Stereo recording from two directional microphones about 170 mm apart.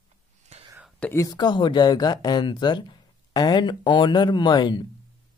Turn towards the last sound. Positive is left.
turn(degrees=25)  # may be behind; listen again after turning